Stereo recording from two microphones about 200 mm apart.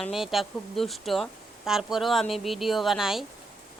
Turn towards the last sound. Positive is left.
turn(degrees=0)  # may be behind; listen again after turning